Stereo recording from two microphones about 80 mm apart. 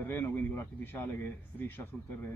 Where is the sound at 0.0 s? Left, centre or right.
Left.